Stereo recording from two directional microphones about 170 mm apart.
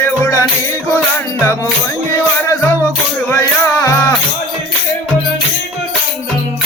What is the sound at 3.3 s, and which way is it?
Music, 15° left (ahead or behind).